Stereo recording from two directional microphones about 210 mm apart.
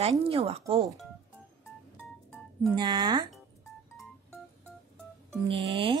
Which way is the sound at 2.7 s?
20° right (ahead or behind).